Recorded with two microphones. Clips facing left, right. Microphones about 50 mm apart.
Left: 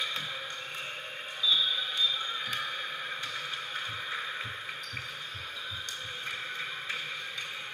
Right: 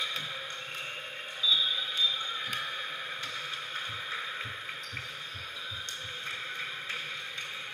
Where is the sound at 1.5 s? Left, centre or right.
Left.